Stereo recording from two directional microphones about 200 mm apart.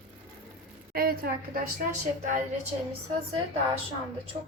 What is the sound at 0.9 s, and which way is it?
Speech, 50° right (ahead or behind).